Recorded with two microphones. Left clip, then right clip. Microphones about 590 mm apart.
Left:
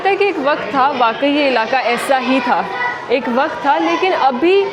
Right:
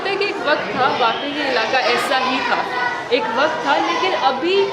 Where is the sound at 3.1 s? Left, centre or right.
Left.